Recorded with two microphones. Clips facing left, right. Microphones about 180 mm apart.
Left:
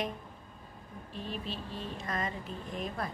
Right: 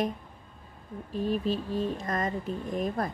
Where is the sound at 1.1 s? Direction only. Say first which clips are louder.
Right 11 dB; 45° right (ahead or behind).